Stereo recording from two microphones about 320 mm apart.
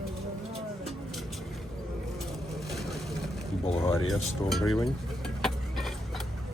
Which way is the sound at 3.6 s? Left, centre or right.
Centre.